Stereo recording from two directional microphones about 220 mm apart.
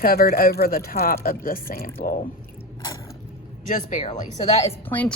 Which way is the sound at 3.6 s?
35° left (ahead or behind).